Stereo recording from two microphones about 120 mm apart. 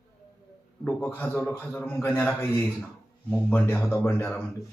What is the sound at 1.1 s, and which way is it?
A man's voice, 15° left (ahead or behind).